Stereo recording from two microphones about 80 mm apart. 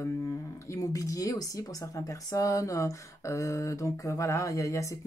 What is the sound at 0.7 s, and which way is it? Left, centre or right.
Speech, left.